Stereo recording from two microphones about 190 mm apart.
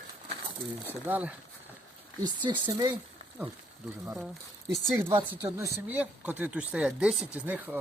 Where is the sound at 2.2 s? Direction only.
25° right (ahead or behind).